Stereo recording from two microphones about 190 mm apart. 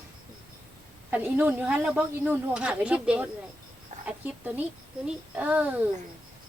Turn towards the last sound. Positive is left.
turn(degrees=-10)  # may be behind; listen again after turning